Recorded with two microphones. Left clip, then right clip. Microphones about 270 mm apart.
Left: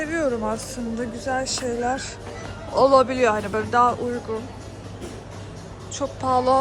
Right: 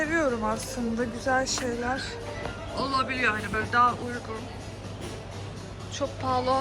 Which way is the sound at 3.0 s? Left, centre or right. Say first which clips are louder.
Left 6 dB; centre.